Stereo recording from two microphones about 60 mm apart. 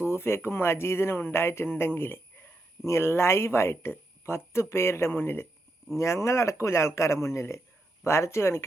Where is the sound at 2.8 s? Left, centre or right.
Left.